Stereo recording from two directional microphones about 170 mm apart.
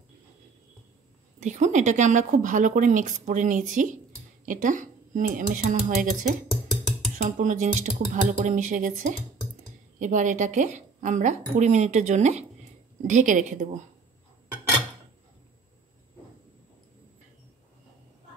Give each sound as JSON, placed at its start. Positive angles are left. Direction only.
{"t": 1.4, "sound": "a woman's voice", "side_deg": -45}